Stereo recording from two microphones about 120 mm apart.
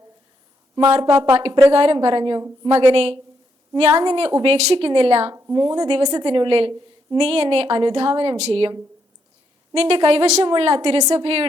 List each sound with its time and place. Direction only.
0.8 s a woman's voice: 45° right (ahead or behind)
4.4 s a woman's voice: 55° right (ahead or behind)
5.3 s a woman's voice: 30° right (ahead or behind); by 8.7 s 55° right (ahead or behind)
9.7 s a woman's voice: 50° right (ahead or behind)
10.4 s a woman's voice: 45° right (ahead or behind)